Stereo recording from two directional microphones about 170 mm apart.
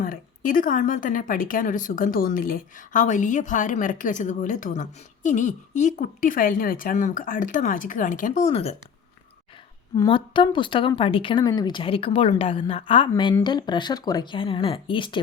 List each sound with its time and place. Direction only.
0.0 s speech: 55° left (ahead or behind)
10.1 s speech: 30° left (ahead or behind)